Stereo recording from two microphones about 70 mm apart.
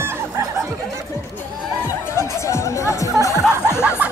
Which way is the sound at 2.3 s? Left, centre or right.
Left.